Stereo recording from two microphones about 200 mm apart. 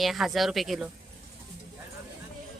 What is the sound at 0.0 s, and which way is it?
Speech, centre (ahead or behind).